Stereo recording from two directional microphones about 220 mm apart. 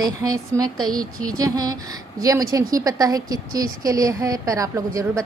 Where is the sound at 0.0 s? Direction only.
15° right (ahead or behind).